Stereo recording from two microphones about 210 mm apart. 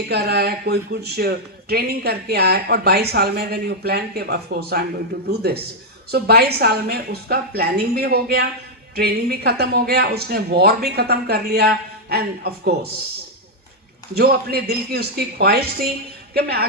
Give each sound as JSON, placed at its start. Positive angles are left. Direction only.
{"t": 0.1, "sound": "speech", "side_deg": -50}
{"t": 14.2, "sound": "speech", "side_deg": -50}